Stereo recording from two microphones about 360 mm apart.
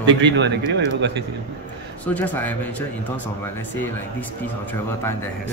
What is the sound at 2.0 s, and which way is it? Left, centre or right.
Speech, centre.